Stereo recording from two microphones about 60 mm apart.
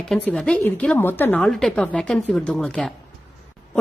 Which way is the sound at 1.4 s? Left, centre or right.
Centre.